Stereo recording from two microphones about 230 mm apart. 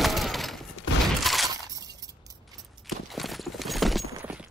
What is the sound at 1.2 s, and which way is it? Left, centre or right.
Shatter, centre.